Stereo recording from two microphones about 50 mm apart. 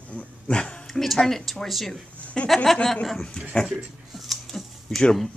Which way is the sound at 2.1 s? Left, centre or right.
Left.